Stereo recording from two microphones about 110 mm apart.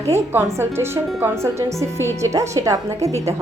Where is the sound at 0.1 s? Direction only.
20° right (ahead or behind).